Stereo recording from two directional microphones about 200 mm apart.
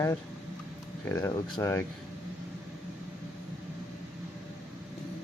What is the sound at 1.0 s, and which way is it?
Speech, 10° left (ahead or behind).